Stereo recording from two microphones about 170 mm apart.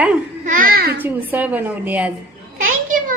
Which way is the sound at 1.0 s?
10° right (ahead or behind).